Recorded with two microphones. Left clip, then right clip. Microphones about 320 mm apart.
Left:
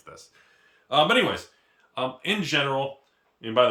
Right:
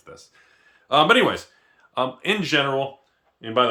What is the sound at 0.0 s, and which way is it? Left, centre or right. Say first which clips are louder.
Speech: right 2 dB; centre.